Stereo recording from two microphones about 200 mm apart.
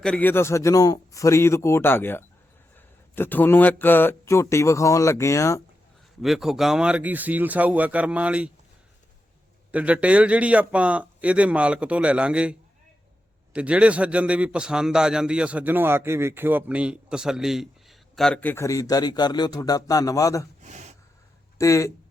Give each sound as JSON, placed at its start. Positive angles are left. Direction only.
{"t": 0.0, "sound": "speech", "side_deg": 5}
{"t": 6.2, "sound": "speech", "side_deg": 0}
{"t": 9.7, "sound": "a man's voice", "side_deg": -5}
{"t": 20.6, "sound": "gasp", "side_deg": -35}
{"t": 21.6, "sound": "speech", "side_deg": 15}